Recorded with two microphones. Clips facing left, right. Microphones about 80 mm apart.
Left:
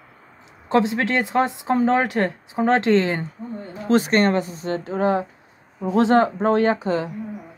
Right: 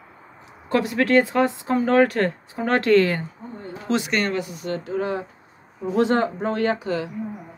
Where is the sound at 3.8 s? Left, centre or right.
Left.